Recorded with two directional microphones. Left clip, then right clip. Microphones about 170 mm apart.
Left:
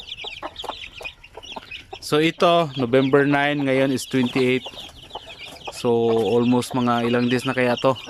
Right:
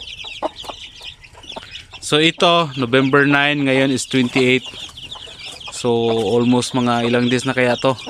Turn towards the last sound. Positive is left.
turn(degrees=0)  # may be behind; listen again after turning